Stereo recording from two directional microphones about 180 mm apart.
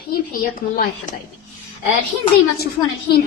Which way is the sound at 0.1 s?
55° left (ahead or behind).